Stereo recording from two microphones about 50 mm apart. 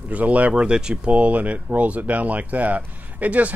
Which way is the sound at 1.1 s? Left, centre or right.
Right.